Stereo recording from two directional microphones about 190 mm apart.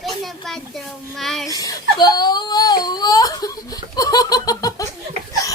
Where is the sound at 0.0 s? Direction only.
Centre (ahead or behind).